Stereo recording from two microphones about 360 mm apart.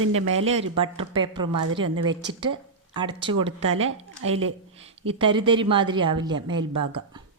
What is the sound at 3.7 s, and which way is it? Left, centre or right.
Speech, right.